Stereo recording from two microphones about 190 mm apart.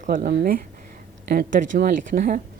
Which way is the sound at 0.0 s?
45° right (ahead or behind).